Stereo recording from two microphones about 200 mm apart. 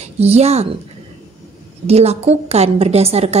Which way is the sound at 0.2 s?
30° right (ahead or behind).